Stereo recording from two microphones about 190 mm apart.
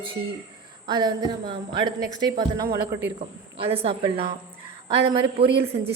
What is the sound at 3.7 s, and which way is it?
Speech, 30° right (ahead or behind).